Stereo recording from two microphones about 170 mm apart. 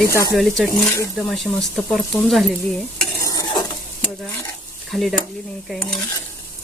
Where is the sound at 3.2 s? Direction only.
20° left (ahead or behind).